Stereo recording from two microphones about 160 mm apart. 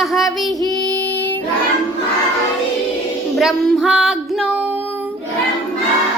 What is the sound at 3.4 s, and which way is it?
Music, 5° right (ahead or behind).